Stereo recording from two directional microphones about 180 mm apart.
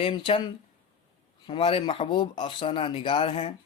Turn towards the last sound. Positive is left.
turn(degrees=30)  # may be behind; listen again after turning